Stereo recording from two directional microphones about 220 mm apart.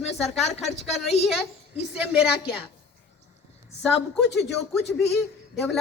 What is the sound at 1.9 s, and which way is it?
Speech, 5° right (ahead or behind).